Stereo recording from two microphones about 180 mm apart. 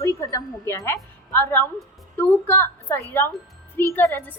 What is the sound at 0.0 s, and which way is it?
Wind chime, 15° left (ahead or behind).